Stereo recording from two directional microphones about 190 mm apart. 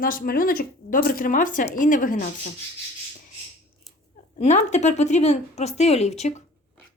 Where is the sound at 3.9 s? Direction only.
Centre (ahead or behind).